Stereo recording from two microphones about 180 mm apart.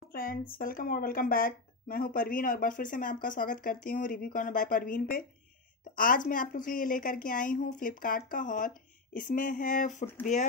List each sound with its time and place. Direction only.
0.1 s speech: 55° left (ahead or behind)